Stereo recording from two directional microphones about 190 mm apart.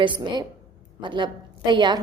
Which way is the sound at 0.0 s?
25° right (ahead or behind).